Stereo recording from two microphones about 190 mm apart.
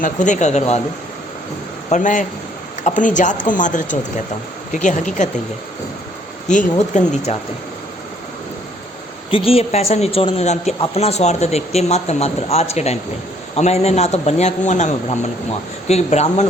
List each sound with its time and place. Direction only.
0.0 s a man's voice: 40° left (ahead or behind)
1.9 s a man's voice: 40° left (ahead or behind)
6.5 s a man's voice: 40° left (ahead or behind)
9.3 s a man's voice: 30° left (ahead or behind)